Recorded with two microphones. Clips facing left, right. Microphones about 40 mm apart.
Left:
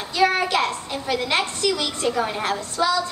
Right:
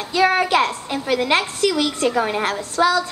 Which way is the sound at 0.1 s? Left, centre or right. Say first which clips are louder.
Right 3 dB; centre.